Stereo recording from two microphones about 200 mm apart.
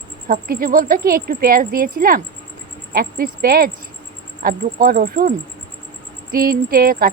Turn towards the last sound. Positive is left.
turn(degrees=-45)  # may be behind; listen again after turning